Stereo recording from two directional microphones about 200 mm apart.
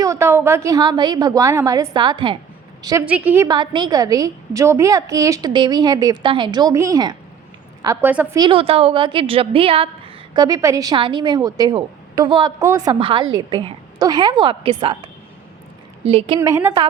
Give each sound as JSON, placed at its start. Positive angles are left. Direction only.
{"t": 0.0, "sound": "a woman's voice", "side_deg": -15}
{"t": 3.1, "sound": "a woman's voice", "side_deg": -5}
{"t": 8.4, "sound": "a woman's voice", "side_deg": -25}
{"t": 16.4, "sound": "a woman's voice", "side_deg": -15}